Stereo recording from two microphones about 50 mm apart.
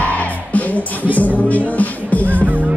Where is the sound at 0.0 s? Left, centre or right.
Left.